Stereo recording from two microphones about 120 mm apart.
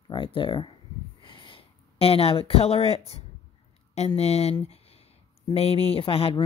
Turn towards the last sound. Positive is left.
turn(degrees=50)  # may be behind; listen again after turning